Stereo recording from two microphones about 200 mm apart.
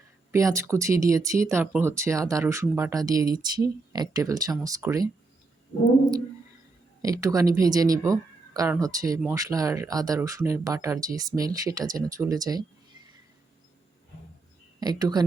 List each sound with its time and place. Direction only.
0.3 s speech: 15° right (ahead or behind)
7.0 s speech: 15° right (ahead or behind)
14.8 s speech: 20° right (ahead or behind)